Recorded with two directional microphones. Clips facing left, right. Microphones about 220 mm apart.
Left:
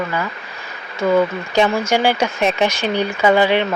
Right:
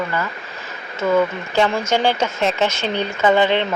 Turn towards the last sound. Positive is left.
turn(degrees=10)  # may be behind; listen again after turning